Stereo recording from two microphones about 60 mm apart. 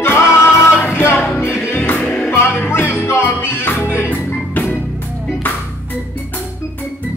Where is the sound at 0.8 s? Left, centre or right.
Left.